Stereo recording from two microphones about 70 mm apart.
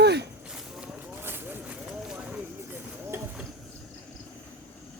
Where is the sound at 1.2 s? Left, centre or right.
Right.